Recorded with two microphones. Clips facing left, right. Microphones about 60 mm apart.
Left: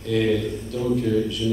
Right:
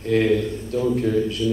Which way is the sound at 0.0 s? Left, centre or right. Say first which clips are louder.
Right 3 dB; right.